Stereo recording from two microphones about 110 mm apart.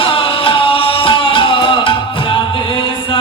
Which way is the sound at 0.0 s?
55° left (ahead or behind).